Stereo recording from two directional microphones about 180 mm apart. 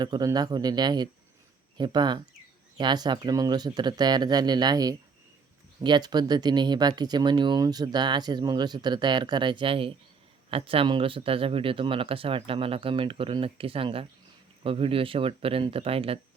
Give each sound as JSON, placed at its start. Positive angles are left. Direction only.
{"t": 0.0, "sound": "speech", "side_deg": -20}